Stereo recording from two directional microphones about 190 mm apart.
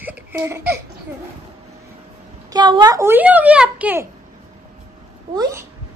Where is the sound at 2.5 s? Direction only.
25° right (ahead or behind).